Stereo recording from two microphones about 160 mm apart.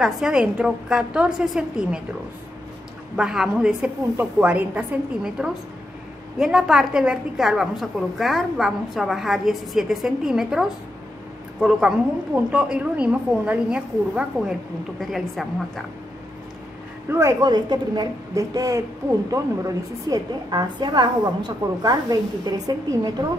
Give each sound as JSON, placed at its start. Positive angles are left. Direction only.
{"t": 0.0, "sound": "a woman's voice", "side_deg": -5}
{"t": 3.2, "sound": "a woman's voice", "side_deg": -5}
{"t": 12.4, "sound": "a woman's voice", "side_deg": -5}
{"t": 17.1, "sound": "a woman's voice", "side_deg": -20}